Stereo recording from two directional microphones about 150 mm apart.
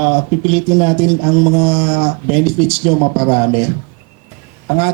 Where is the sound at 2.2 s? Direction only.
10° right (ahead or behind).